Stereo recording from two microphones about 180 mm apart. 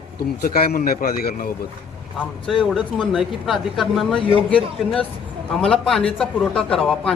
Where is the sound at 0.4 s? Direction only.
55° left (ahead or behind).